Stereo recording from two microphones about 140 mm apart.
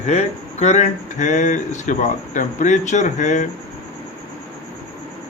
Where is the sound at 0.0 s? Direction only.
50° left (ahead or behind).